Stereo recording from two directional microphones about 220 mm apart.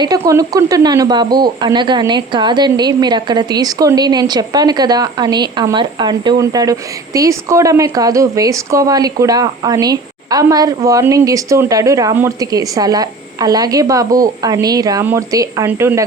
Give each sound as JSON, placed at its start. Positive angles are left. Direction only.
{"t": 0.0, "sound": "speech", "side_deg": -15}